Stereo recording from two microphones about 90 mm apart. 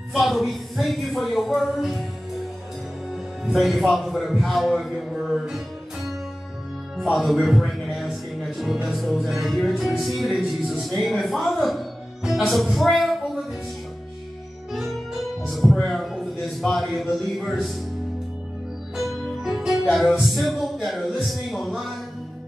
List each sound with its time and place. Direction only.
0.1 s music: centre (ahead or behind)
3.4 s music: centre (ahead or behind)
7.0 s speech: centre (ahead or behind)
8.7 s music: 5° right (ahead or behind)
15.4 s music: centre (ahead or behind)
18.9 s music: centre (ahead or behind)